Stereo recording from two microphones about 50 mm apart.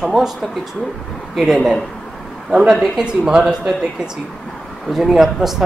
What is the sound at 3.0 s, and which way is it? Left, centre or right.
Speech, centre.